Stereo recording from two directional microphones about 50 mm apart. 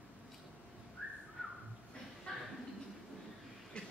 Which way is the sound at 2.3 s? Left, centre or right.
Centre.